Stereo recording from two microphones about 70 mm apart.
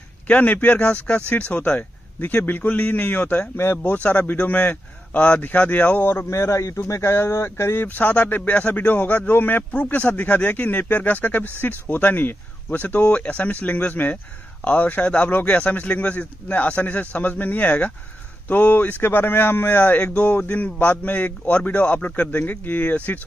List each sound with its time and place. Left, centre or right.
0.3 s speech: left
3.5 s speech: left
6.0 s speech: left